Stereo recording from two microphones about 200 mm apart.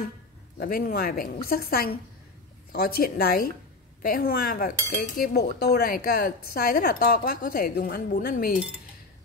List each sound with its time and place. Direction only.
0.6 s speech: 50° left (ahead or behind)